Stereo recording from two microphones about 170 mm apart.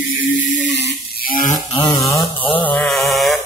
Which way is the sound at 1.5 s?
25° left (ahead or behind).